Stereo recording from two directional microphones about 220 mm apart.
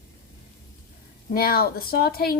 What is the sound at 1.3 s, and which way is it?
A woman's voice, 45° left (ahead or behind).